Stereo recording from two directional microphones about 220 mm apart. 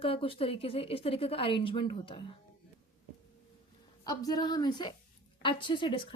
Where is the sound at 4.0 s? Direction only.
15° left (ahead or behind).